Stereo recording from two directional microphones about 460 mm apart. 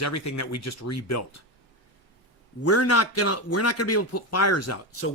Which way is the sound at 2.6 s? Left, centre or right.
Left.